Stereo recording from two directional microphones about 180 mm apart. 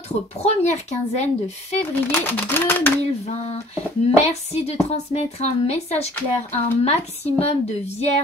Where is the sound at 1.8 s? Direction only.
10° left (ahead or behind).